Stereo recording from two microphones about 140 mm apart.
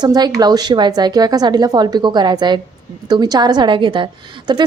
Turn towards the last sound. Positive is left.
turn(degrees=-35)  # may be behind; listen again after turning